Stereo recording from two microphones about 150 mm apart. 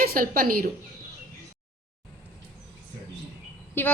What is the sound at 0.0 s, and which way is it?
Speech, 75° right (ahead or behind).